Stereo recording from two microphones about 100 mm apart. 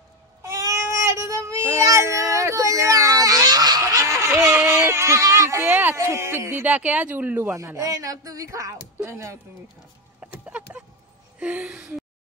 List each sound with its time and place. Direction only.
0.4 s a sound: 35° right (ahead or behind)
3.8 s a sound: 30° right (ahead or behind)
5.9 s speech: 30° right (ahead or behind)
7.5 s speech: 30° right (ahead or behind)
10.2 s chicken: 15° right (ahead or behind)
11.3 s speech: 10° right (ahead or behind)